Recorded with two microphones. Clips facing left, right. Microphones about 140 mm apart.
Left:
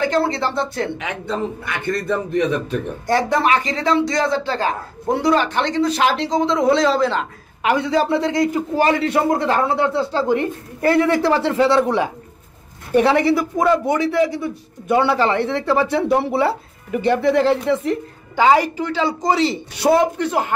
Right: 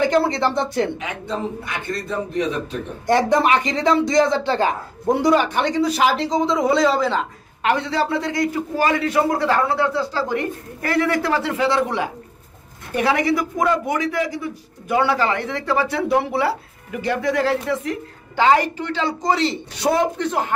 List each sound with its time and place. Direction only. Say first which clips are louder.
0.0 s speech: right 1 dB; 15° right (ahead or behind)
0.9 s a man's voice: left 2 dB; 65° left (ahead or behind)
3.1 s a man's voice: right 1 dB; 20° right (ahead or behind); by 7.2 s centre (ahead or behind)
7.6 s a man's voice: left 3 dB; 15° left (ahead or behind)
12.9 s a man's voice: left 4 dB; 30° left (ahead or behind)
18.3 s a woman's voice: left 2 dB; 10° left (ahead or behind)